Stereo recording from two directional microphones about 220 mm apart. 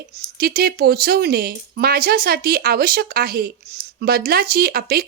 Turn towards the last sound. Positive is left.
turn(degrees=-45)  # may be behind; listen again after turning